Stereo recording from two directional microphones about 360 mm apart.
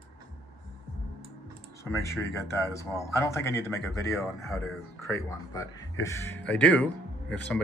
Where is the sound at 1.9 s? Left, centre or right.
Centre.